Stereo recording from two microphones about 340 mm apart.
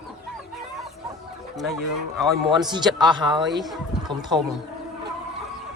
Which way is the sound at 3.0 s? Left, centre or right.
Centre.